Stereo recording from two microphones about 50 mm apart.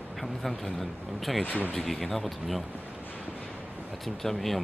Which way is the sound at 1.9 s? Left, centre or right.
Centre.